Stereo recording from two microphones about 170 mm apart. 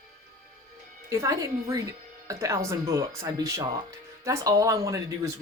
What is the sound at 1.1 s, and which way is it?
Speech, 20° right (ahead or behind).